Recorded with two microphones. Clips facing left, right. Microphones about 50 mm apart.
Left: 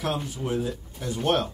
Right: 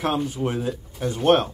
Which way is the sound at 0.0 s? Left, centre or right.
Right.